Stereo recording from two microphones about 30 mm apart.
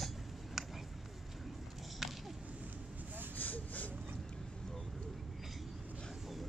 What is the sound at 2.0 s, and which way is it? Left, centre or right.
Whip, centre.